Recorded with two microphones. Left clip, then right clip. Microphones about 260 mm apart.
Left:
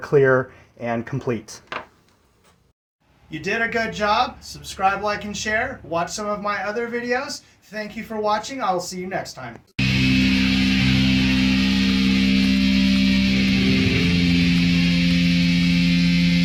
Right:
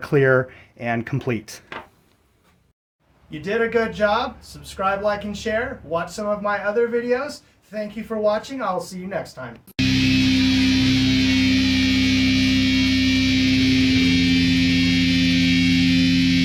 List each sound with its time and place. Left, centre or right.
0.0 s speech: right
3.2 s speech: centre
9.0 s music: centre